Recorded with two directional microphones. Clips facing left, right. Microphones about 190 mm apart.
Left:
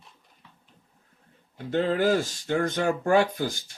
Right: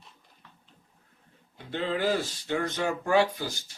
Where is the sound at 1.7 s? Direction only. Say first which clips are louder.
Left 5 dB; 45° left (ahead or behind).